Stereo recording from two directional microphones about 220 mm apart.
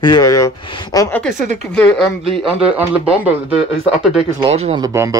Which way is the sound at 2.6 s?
5° right (ahead or behind).